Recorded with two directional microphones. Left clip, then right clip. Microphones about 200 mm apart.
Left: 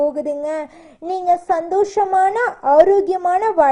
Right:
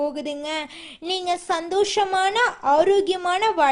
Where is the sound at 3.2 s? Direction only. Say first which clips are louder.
Left 5 dB; 25° right (ahead or behind).